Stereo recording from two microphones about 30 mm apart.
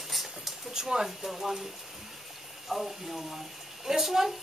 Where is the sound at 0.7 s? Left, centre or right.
Right.